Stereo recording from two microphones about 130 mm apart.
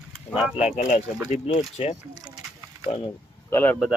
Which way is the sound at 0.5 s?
55° left (ahead or behind).